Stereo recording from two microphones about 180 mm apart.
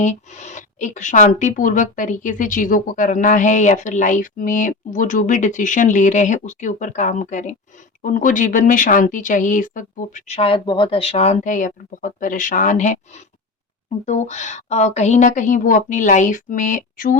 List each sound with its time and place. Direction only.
0.0 s speech: 40° left (ahead or behind)